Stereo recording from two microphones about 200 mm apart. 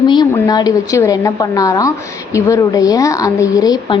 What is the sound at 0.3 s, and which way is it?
A woman's voice, 20° left (ahead or behind).